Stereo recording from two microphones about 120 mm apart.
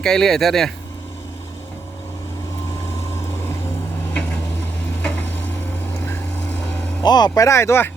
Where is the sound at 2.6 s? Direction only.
25° left (ahead or behind).